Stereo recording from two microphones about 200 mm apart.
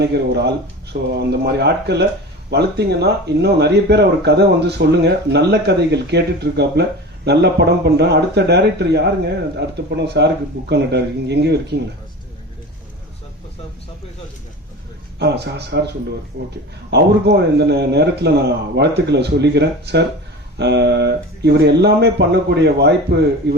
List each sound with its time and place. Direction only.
0.0 s speech: 55° right (ahead or behind)
15.2 s speech: 55° right (ahead or behind)
16.4 s speech: 65° right (ahead or behind)
16.9 s speech: 55° right (ahead or behind)